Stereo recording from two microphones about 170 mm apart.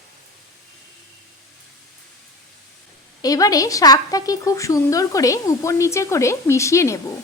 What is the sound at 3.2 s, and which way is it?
A woman's voice, 20° left (ahead or behind).